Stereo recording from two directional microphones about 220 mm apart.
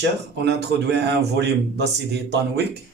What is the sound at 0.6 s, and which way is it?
Speech, 50° right (ahead or behind).